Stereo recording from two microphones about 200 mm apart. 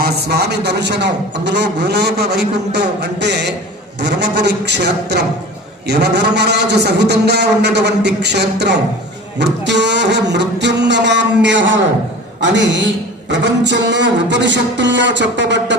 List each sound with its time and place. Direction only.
0.0 s a man's voice: 55° right (ahead or behind)